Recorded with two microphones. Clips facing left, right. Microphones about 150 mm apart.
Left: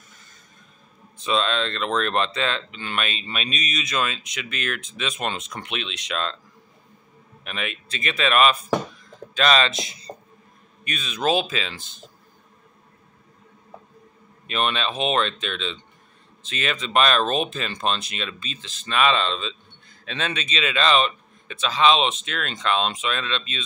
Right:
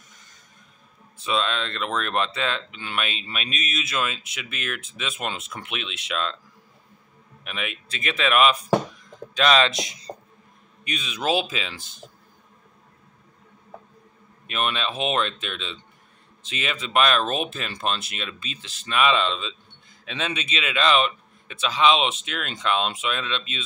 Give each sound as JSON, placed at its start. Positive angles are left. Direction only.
{"t": 1.1, "sound": "speech", "side_deg": -10}
{"t": 7.4, "sound": "speech", "side_deg": -5}
{"t": 14.5, "sound": "speech", "side_deg": -5}